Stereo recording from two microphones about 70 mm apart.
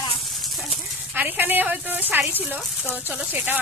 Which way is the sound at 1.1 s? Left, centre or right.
Right.